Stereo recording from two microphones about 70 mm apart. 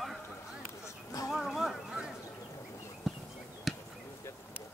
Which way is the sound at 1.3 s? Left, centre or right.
Centre.